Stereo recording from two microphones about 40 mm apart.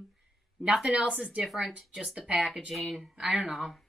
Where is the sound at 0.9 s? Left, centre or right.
Right.